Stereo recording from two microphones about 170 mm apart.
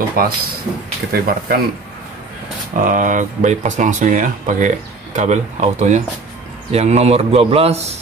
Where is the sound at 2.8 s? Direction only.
50° right (ahead or behind).